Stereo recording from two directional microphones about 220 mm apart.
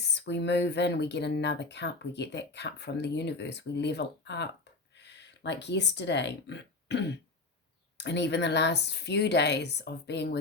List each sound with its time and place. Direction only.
0.1 s speech: 50° left (ahead or behind)